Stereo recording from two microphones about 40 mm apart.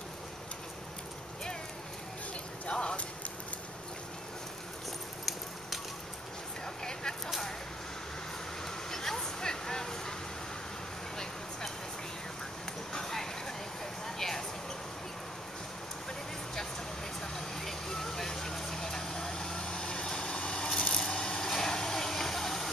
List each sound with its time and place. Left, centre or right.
2.6 s clip-clop: left
6.8 s vehicle: centre
8.6 s vehicle: centre
12.9 s a sound: centre
17.2 s vehicle: centre